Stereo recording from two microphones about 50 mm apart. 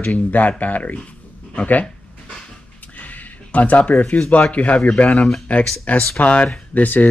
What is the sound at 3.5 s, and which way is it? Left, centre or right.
Speech, left.